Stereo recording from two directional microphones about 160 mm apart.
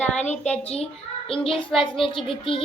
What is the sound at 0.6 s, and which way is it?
A child's voice, 40° left (ahead or behind).